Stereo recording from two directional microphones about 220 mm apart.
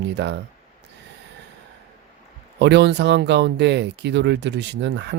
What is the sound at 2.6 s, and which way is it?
Speech, 50° right (ahead or behind).